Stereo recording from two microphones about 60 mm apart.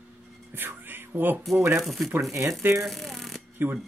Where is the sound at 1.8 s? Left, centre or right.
Centre.